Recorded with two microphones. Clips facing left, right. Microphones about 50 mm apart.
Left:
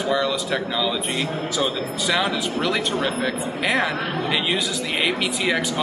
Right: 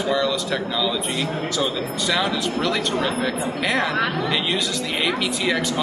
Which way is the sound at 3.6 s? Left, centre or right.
Centre.